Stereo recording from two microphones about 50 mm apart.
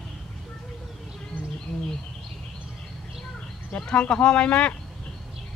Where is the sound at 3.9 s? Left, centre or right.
Centre.